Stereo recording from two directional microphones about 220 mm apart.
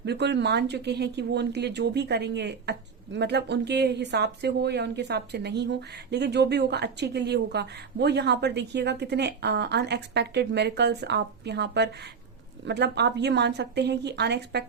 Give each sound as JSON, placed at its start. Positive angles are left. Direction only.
{"t": 0.0, "sound": "speech", "side_deg": -50}